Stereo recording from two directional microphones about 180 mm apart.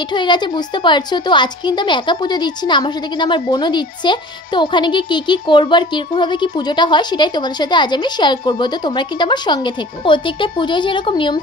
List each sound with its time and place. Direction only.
0.1 s a woman's voice: 25° left (ahead or behind)